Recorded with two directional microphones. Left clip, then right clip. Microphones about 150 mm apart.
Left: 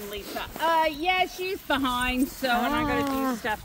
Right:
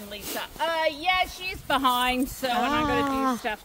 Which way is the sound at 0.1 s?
80° right.